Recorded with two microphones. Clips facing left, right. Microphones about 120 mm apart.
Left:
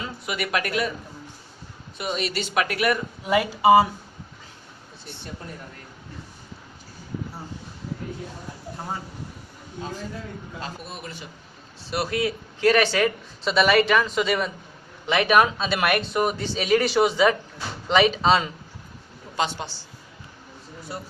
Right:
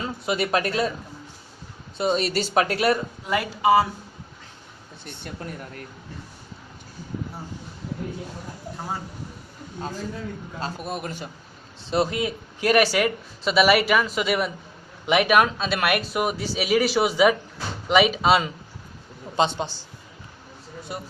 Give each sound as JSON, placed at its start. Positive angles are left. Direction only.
{"t": 0.3, "sound": "speech", "side_deg": -30}
{"t": 2.0, "sound": "speech", "side_deg": -35}
{"t": 3.2, "sound": "speech", "side_deg": 10}
{"t": 10.8, "sound": "a man's voice", "side_deg": -50}
{"t": 11.9, "sound": "speech", "side_deg": -20}
{"t": 15.3, "sound": "speech", "side_deg": 0}
{"t": 19.4, "sound": "speech", "side_deg": -20}